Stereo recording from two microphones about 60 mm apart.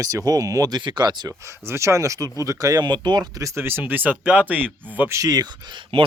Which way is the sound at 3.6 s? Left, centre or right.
Right.